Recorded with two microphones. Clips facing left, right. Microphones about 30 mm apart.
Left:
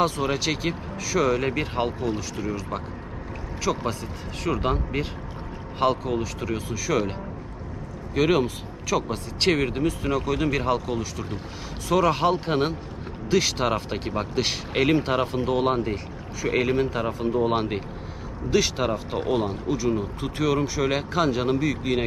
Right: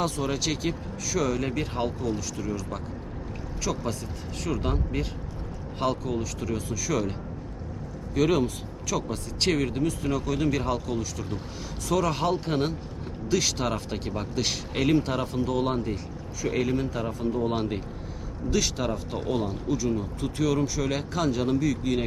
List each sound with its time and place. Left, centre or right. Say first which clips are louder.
0.0 s speech: left 4 dB; left
8.1 s speech: left 2 dB; left